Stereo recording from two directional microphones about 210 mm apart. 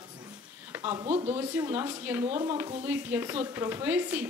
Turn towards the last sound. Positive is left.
turn(degrees=-10)  # may be behind; listen again after turning